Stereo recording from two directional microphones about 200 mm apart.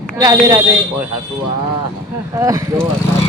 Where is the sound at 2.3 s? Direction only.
15° right (ahead or behind).